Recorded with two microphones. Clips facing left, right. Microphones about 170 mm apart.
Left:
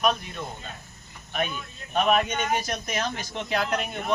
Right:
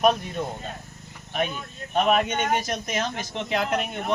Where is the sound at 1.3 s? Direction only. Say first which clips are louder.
Right 2 dB; 30° right (ahead or behind).